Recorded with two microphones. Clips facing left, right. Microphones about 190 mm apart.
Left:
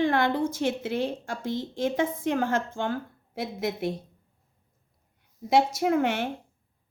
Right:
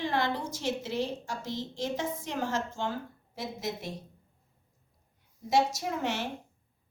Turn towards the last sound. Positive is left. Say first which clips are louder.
# left 8 dB
turn(degrees=55)  # may be behind; listen again after turning